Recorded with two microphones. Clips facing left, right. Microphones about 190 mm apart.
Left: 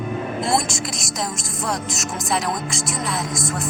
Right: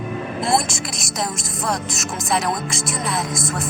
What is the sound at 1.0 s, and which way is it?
A woman's voice, 60° right (ahead or behind).